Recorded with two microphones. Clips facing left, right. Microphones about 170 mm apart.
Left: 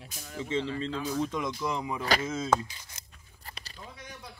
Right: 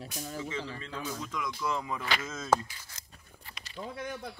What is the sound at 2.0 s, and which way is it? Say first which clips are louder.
Speech: left 6 dB; 35° left (ahead or behind).